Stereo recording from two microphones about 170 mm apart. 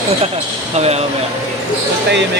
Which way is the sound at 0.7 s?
40° right (ahead or behind).